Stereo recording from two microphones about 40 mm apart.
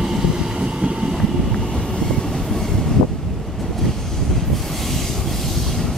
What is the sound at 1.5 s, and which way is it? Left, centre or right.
Train, centre.